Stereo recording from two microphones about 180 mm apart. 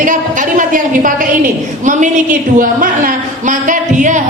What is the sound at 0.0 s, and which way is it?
A woman's voice, 45° right (ahead or behind).